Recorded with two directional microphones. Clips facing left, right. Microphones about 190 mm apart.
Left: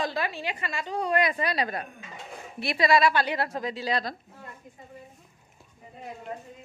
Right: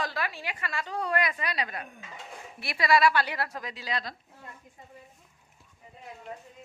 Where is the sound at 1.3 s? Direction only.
35° left (ahead or behind).